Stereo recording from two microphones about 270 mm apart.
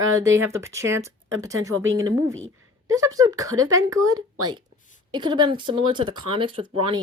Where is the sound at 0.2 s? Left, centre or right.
Centre.